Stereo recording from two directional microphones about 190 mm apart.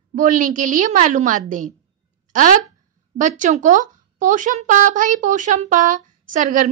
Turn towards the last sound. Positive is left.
turn(degrees=-45)  # may be behind; listen again after turning